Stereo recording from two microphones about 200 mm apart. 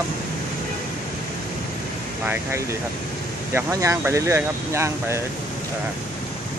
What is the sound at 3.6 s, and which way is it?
Speech, 15° right (ahead or behind).